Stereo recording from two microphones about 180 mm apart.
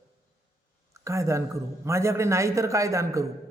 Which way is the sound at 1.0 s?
15° right (ahead or behind).